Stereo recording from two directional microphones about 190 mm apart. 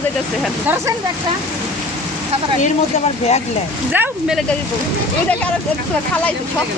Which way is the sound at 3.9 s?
5° right (ahead or behind).